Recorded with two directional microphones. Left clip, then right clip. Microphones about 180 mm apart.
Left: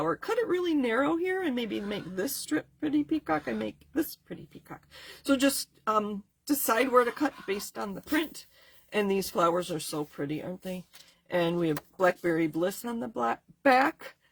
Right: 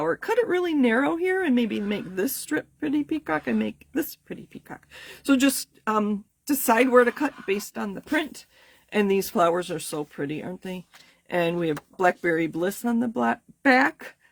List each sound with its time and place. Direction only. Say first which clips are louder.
0.0 s speech: right 5 dB; 45° right (ahead or behind)